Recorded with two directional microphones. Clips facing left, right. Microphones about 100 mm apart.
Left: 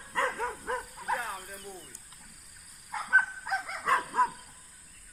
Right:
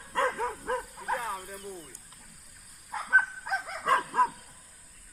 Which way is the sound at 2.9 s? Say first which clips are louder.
Right 1 dB; 30° right (ahead or behind).